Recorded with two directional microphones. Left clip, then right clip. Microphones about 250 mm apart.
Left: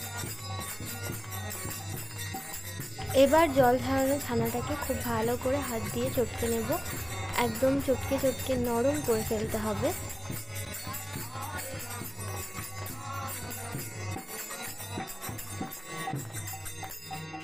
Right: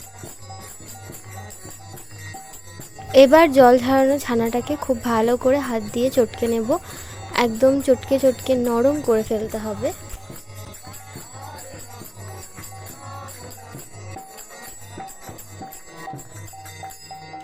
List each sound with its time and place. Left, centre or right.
3.1 s speech: right
9.5 s speech: centre